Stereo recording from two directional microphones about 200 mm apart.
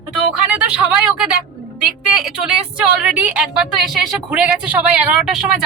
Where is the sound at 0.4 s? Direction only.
5° right (ahead or behind).